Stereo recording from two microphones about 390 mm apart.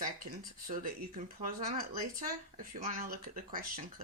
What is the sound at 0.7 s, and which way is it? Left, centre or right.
Speech, centre.